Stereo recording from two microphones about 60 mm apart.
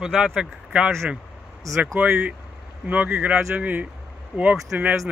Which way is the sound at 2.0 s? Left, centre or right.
Centre.